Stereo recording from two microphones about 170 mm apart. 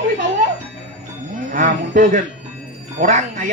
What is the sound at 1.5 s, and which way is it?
Speech, 50° right (ahead or behind).